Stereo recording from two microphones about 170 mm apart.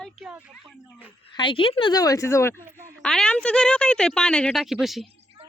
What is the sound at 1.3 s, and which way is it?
A woman's voice, 30° left (ahead or behind).